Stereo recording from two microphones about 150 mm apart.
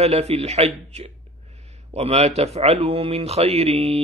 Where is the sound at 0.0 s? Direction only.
45° right (ahead or behind).